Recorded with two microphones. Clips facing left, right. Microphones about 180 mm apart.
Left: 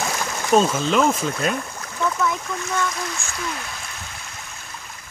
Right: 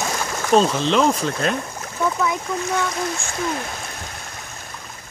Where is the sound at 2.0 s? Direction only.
10° right (ahead or behind).